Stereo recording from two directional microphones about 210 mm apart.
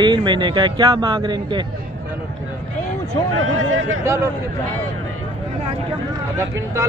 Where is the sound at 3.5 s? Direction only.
70° right (ahead or behind).